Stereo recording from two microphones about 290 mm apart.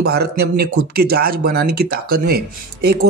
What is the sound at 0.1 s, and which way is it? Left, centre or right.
Speech, right.